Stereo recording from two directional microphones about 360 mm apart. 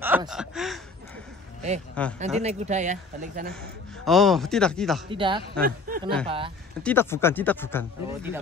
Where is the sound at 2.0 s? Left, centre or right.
Centre.